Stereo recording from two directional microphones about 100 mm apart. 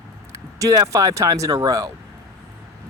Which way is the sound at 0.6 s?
35° right (ahead or behind).